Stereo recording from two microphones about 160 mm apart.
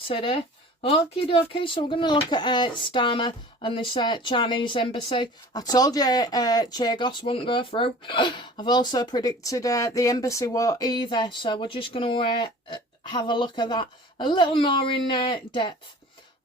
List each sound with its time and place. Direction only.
0.1 s a woman's voice: 35° left (ahead or behind)